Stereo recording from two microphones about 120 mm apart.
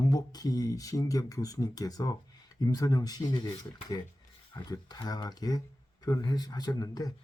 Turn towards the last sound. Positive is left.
turn(degrees=35)  # may be behind; listen again after turning